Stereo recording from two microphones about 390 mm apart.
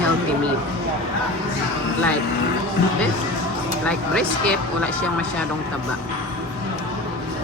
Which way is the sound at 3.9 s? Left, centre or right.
Centre.